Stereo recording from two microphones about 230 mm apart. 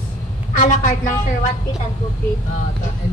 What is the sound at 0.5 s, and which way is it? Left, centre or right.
Speech, left.